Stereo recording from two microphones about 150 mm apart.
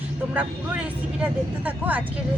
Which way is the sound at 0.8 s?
10° right (ahead or behind).